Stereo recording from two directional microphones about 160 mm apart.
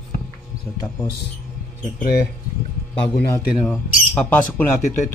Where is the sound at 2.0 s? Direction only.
75° left (ahead or behind).